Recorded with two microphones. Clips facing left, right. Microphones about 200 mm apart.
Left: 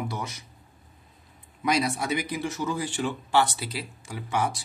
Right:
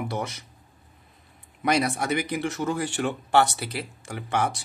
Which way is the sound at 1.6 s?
60° right (ahead or behind).